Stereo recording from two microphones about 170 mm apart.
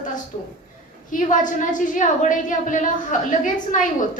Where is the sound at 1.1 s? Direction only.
50° left (ahead or behind).